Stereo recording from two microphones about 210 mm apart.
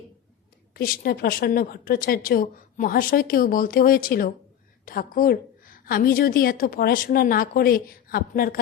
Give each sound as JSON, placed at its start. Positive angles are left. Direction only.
{"t": 0.7, "sound": "a woman's voice", "side_deg": 45}